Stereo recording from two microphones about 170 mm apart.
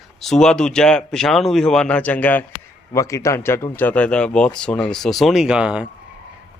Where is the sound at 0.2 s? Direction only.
5° left (ahead or behind).